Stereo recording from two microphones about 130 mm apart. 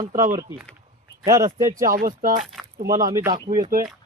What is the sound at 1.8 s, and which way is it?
Speech, 90° right.